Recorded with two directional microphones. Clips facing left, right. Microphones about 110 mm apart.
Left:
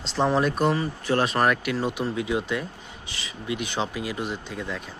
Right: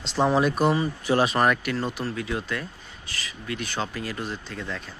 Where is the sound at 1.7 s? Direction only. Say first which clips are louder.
Left 2 dB; 15° left (ahead or behind).